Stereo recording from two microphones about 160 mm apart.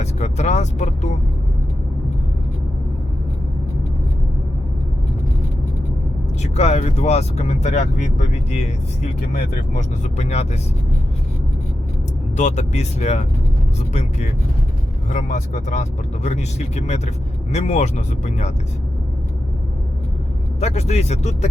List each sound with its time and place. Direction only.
0.0 s vehicle: 45° left (ahead or behind)
6.4 s speech: 45° left (ahead or behind)
12.4 s speech: 45° left (ahead or behind)
20.6 s speech: 45° left (ahead or behind)